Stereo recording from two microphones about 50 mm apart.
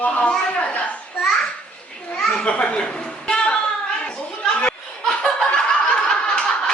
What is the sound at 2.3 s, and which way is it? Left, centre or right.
Speech, centre.